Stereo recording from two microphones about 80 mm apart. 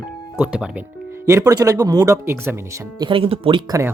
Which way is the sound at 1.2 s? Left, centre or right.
Right.